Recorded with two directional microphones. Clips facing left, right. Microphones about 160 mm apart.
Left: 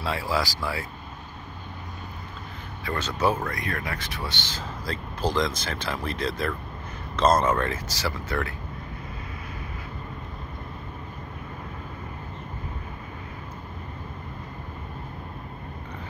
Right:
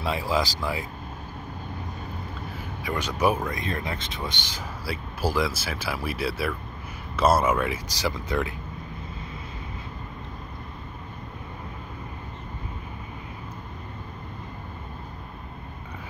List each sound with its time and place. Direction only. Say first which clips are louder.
0.0 s speech: right 1 dB; 20° right (ahead or behind)
2.8 s speech: right 1 dB; 15° right (ahead or behind)